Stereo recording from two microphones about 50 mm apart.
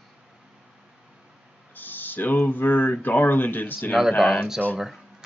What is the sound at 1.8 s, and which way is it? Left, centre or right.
Speech, left.